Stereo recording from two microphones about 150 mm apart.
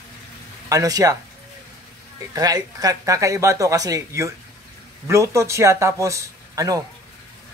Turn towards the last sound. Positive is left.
turn(degrees=-20)  # may be behind; listen again after turning